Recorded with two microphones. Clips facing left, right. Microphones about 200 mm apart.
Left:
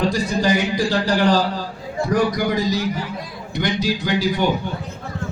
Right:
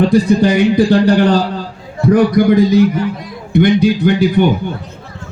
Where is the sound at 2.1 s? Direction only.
55° right (ahead or behind).